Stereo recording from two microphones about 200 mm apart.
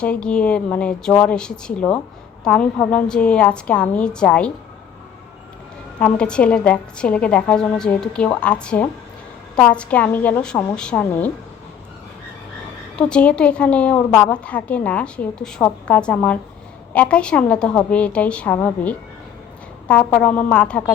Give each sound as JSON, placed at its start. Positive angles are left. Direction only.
{"t": 0.0, "sound": "a woman's voice", "side_deg": 5}
{"t": 6.1, "sound": "a woman's voice", "side_deg": 5}
{"t": 13.0, "sound": "a woman's voice", "side_deg": 5}